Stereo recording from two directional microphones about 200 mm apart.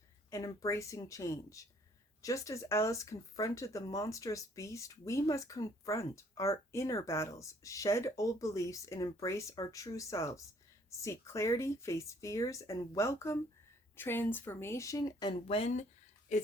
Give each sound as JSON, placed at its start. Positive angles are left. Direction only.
{"t": 0.3, "sound": "speech", "side_deg": 15}